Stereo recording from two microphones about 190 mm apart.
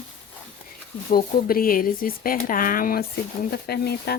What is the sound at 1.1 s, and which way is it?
Speech, 50° left (ahead or behind).